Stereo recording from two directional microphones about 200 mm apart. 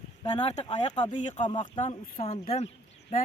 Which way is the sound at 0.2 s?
30° left (ahead or behind).